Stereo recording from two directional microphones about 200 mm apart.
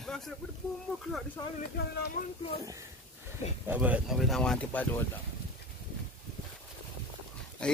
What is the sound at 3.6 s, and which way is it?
Speech, 5° right (ahead or behind).